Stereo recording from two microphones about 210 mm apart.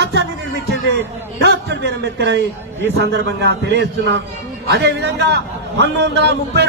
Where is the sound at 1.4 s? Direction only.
55° right (ahead or behind).